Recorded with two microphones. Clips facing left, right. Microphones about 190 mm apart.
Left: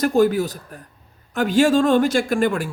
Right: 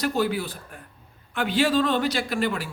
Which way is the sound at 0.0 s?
45° left (ahead or behind).